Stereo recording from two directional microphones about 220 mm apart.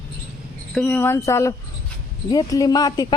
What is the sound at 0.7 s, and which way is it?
A woman's voice, 5° left (ahead or behind).